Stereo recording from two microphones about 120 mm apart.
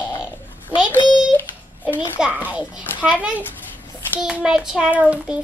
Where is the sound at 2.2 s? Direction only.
10° right (ahead or behind).